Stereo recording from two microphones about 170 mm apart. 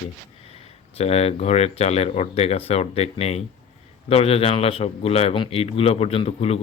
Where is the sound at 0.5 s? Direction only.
35° left (ahead or behind).